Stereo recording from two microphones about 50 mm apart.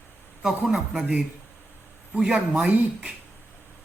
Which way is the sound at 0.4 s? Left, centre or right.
Centre.